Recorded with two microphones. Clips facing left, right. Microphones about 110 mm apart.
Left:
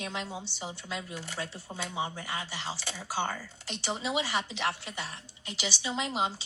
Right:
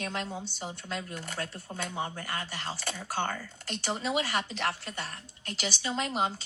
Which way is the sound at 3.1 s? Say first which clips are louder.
Even; 10° left (ahead or behind).